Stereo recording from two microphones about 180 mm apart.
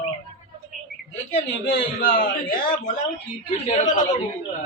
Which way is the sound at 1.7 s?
55° left (ahead or behind).